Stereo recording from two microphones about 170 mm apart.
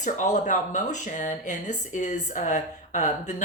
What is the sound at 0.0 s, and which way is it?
Speech, 45° left (ahead or behind).